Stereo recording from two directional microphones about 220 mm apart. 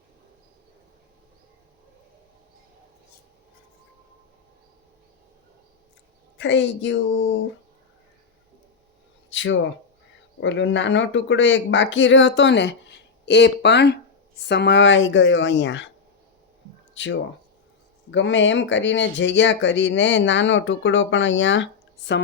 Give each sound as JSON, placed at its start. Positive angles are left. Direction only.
{"t": 6.3, "sound": "speech", "side_deg": 55}
{"t": 9.3, "sound": "a sound", "side_deg": 60}
{"t": 10.4, "sound": "speech", "side_deg": 55}
{"t": 16.9, "sound": "speech", "side_deg": 55}